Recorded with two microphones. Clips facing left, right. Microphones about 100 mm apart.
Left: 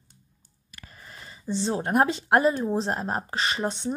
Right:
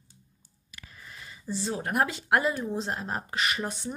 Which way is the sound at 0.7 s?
45° left (ahead or behind).